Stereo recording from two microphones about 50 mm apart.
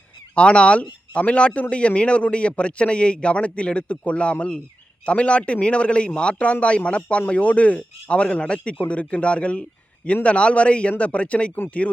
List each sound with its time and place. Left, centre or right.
0.3 s a man's voice: left